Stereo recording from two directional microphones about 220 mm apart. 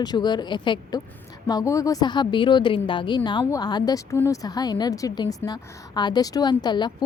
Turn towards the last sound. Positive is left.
turn(degrees=20)  # may be behind; listen again after turning